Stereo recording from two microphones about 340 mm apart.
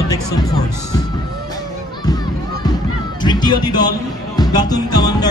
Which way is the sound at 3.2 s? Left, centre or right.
Centre.